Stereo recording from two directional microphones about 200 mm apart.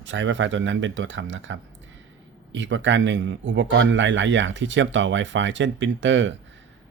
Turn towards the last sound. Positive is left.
turn(degrees=-65)  # may be behind; listen again after turning